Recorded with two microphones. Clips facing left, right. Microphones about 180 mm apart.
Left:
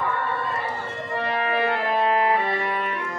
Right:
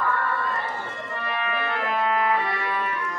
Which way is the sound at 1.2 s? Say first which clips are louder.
Left 5 dB; 35° left (ahead or behind).